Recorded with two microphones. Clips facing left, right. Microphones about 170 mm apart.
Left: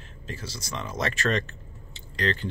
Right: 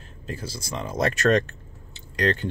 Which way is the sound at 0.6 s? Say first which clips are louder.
Right 5 dB; 35° right (ahead or behind).